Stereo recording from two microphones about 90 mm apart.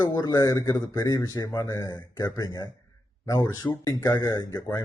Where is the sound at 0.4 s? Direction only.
35° left (ahead or behind).